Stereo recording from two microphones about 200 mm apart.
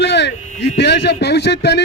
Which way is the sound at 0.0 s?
60° left (ahead or behind).